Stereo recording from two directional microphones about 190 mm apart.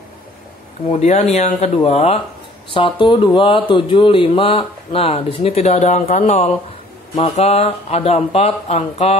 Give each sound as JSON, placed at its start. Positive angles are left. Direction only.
{"t": 0.8, "sound": "speech", "side_deg": 35}